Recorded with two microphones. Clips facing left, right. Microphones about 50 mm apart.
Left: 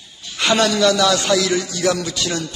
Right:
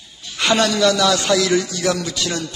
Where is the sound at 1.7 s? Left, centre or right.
Centre.